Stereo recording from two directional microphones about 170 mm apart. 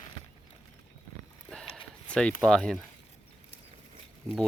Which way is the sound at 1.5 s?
5° left (ahead or behind).